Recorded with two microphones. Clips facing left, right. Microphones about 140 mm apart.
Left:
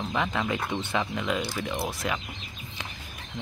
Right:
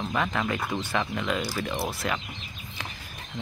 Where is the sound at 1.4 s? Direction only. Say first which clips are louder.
Right 1 dB; centre (ahead or behind).